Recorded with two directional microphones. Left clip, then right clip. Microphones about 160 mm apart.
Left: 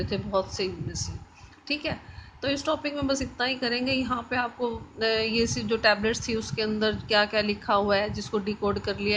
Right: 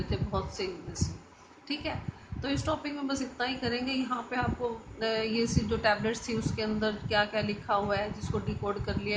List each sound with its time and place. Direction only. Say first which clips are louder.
0.1 s a woman's voice: left 8 dB; 45° left (ahead or behind)